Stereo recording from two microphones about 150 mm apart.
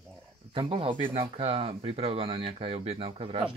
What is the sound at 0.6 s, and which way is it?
Speech, 35° right (ahead or behind).